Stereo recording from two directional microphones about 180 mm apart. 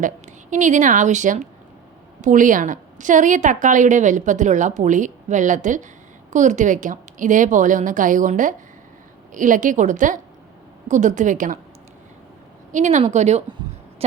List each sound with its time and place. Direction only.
0.5 s a woman's voice: 45° right (ahead or behind)
12.7 s speech: 40° right (ahead or behind)